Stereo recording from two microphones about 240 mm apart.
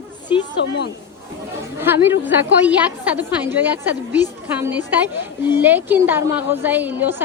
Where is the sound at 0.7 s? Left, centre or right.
Left.